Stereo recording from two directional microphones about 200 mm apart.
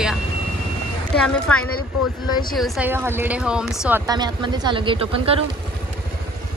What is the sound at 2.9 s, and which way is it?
Speech, 10° right (ahead or behind).